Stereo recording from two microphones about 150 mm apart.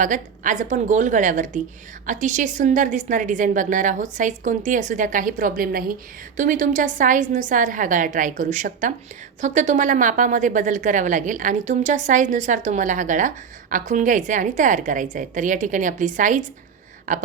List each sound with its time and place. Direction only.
0.0 s a woman's voice: 60° right (ahead or behind)